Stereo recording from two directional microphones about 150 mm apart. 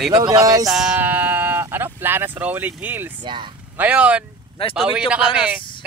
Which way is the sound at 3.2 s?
30° right (ahead or behind).